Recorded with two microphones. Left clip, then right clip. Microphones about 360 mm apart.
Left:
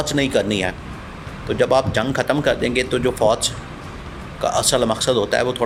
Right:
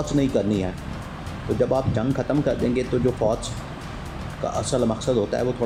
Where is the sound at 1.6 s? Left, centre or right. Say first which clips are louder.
Left 6 dB; left.